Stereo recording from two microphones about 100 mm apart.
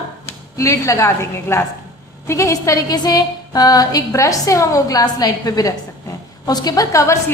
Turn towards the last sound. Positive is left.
turn(degrees=30)  # may be behind; listen again after turning